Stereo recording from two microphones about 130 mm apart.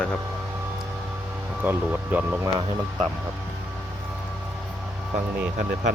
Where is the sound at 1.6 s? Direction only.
10° right (ahead or behind).